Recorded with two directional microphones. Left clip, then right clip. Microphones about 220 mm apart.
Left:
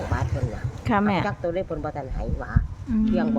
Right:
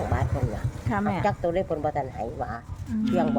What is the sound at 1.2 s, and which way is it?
Speech, 5° right (ahead or behind).